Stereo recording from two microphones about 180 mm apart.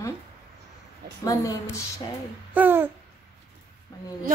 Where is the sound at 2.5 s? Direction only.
10° right (ahead or behind).